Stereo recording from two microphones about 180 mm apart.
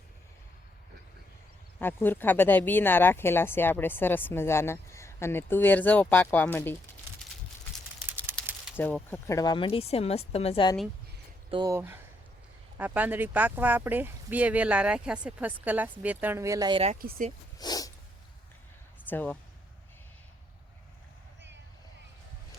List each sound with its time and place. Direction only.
1.8 s speech: 10° left (ahead or behind)
8.7 s speech: 10° left (ahead or behind); by 10.7 s 35° left (ahead or behind)
11.5 s speech: 15° right (ahead or behind)
17.0 s speech: 55° right (ahead or behind)
17.6 s snort: 20° left (ahead or behind)
19.0 s speech: 10° left (ahead or behind)